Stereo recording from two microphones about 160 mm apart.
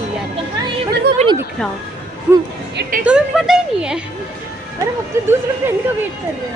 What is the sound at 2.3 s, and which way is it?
Speech, 10° right (ahead or behind).